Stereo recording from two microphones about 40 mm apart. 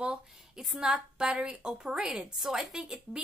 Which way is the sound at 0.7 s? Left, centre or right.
Right.